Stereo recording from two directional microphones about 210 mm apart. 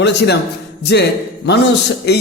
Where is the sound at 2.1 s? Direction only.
50° left (ahead or behind).